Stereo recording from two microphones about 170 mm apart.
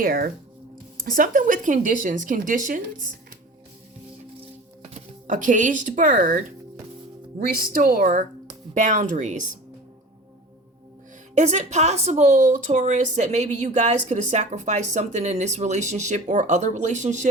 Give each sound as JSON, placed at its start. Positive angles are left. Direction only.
{"t": 0.0, "sound": "a woman's voice", "side_deg": -60}
{"t": 4.9, "sound": "speech", "side_deg": -50}
{"t": 7.3, "sound": "a woman's voice", "side_deg": -60}
{"t": 11.3, "sound": "a woman's voice", "side_deg": -40}